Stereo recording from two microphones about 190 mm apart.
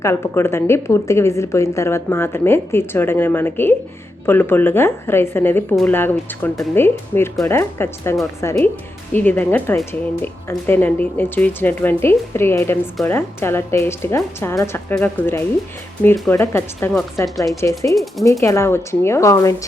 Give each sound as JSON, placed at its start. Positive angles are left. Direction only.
{"t": 0.0, "sound": "a woman's voice", "side_deg": 15}